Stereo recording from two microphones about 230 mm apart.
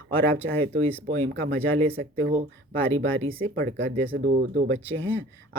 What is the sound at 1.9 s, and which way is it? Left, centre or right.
Speech, right.